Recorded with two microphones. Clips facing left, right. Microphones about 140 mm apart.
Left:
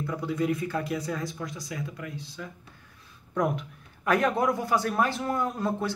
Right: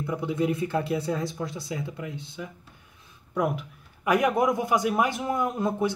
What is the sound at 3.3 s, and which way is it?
Speech, 5° right (ahead or behind).